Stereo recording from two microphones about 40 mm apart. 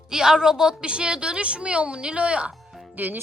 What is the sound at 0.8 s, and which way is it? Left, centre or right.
A woman's voice, right.